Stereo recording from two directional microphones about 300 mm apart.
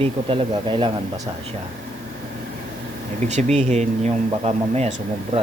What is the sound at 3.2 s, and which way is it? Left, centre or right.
Speech, right.